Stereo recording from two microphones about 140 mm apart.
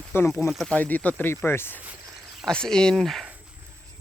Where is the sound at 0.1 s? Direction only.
15° left (ahead or behind).